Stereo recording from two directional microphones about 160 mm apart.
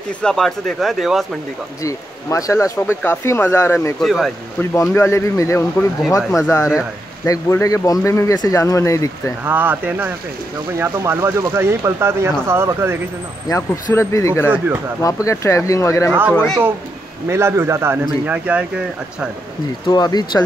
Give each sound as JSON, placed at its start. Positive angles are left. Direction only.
{"t": 0.2, "sound": "speech", "side_deg": 5}
{"t": 1.8, "sound": "speech", "side_deg": 20}
{"t": 4.0, "sound": "speech", "side_deg": 0}
{"t": 4.9, "sound": "speech", "side_deg": 15}
{"t": 7.2, "sound": "speech", "side_deg": 20}
{"t": 9.4, "sound": "speech", "side_deg": -10}
{"t": 13.5, "sound": "speech", "side_deg": 20}
{"t": 16.1, "sound": "speech", "side_deg": -10}
{"t": 16.3, "sound": "speech", "side_deg": 5}
{"t": 17.3, "sound": "speech", "side_deg": -15}
{"t": 19.9, "sound": "speech", "side_deg": 25}